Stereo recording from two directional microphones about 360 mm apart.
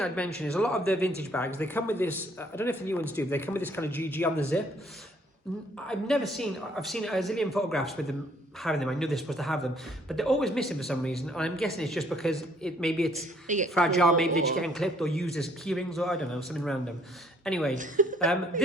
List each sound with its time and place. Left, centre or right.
0.0 s speech: centre
5.9 s speech: centre
13.1 s a woman's voice: centre
13.7 s a woman's voice: centre
17.7 s a woman's voice: right